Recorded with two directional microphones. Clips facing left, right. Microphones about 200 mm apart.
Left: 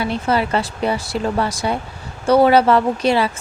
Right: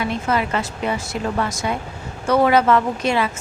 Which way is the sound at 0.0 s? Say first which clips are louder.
Left 2 dB; 30° left (ahead or behind).